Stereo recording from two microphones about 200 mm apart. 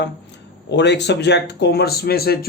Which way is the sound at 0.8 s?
60° left (ahead or behind).